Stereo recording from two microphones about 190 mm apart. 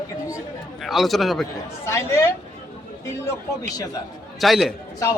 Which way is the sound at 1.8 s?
15° left (ahead or behind).